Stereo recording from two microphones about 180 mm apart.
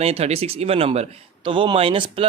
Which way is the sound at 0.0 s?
35° right (ahead or behind).